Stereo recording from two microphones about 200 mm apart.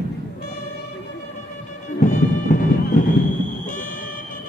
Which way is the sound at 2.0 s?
40° left (ahead or behind).